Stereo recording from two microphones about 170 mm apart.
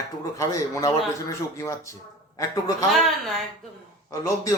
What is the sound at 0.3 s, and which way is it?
A man's voice, 20° left (ahead or behind).